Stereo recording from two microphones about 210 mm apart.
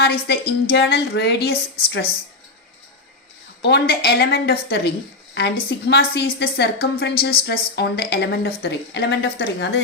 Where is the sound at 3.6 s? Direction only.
50° left (ahead or behind).